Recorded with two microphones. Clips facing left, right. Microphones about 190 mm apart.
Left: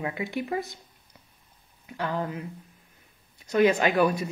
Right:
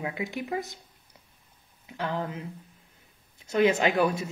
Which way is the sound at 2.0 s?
20° right (ahead or behind).